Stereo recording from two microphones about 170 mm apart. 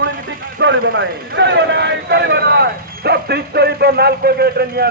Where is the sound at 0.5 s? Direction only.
90° right.